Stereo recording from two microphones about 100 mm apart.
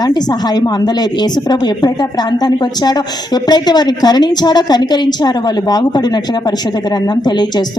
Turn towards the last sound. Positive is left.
turn(degrees=45)  # may be behind; listen again after turning